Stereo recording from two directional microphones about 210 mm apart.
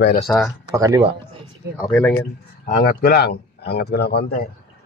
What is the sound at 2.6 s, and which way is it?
Speech, 45° left (ahead or behind).